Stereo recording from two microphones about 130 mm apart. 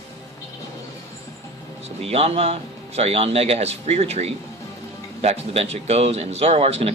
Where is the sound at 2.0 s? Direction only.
50° right (ahead or behind).